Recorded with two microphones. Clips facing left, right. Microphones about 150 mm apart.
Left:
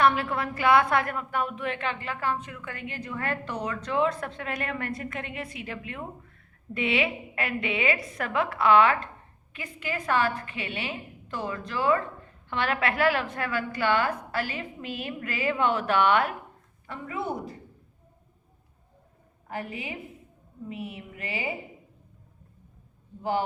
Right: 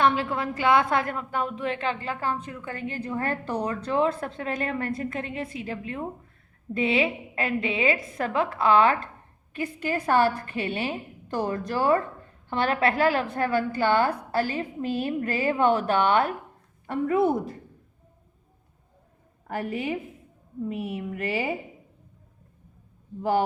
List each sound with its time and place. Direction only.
0.0 s a woman's voice: 25° right (ahead or behind)
16.8 s a woman's voice: 50° right (ahead or behind)
19.5 s a woman's voice: 50° right (ahead or behind)